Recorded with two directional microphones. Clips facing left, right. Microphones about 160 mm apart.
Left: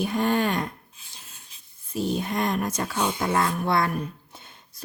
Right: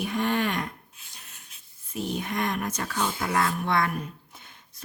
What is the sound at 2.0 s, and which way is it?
Speech, 30° left (ahead or behind).